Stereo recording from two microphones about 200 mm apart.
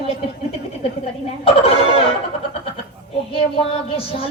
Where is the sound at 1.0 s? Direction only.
30° left (ahead or behind).